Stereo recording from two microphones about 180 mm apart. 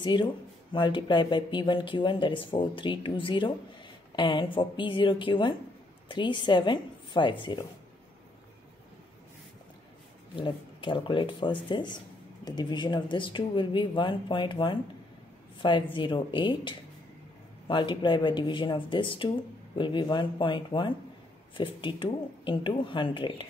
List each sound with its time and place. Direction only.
0.0 s speech: 25° left (ahead or behind)
10.3 s speech: 25° left (ahead or behind)